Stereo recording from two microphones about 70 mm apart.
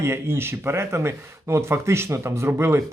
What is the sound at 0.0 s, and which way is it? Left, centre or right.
Speech, right.